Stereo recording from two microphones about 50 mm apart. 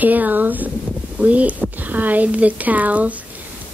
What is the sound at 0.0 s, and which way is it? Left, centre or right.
A woman's voice, right.